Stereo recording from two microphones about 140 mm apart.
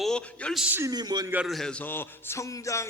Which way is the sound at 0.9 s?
30° right (ahead or behind).